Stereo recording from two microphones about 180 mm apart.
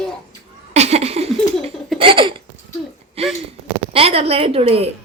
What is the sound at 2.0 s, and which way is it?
Hiccup, 30° right (ahead or behind).